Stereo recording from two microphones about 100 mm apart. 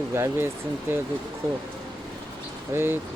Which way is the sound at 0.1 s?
30° right (ahead or behind).